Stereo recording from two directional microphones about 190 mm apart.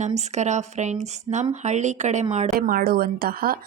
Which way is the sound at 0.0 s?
35° right (ahead or behind).